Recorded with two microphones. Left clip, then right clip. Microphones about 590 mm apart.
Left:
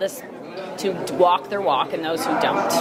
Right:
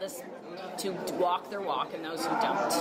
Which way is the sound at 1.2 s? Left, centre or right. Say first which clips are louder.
Left 12 dB; left.